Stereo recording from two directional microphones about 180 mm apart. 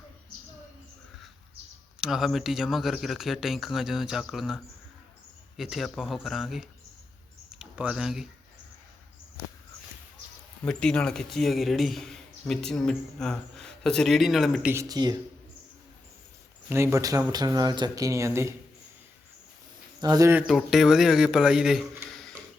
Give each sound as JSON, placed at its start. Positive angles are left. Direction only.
{"t": 2.0, "sound": "a man's voice", "side_deg": 0}
{"t": 10.7, "sound": "a man's voice", "side_deg": 5}
{"t": 14.7, "sound": "speech", "side_deg": -20}
{"t": 16.6, "sound": "speech", "side_deg": -15}
{"t": 20.0, "sound": "speech", "side_deg": -20}
{"t": 20.5, "sound": "a man's voice", "side_deg": 0}